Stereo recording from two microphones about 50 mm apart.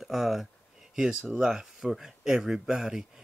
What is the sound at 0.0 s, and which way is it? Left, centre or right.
Speech, centre.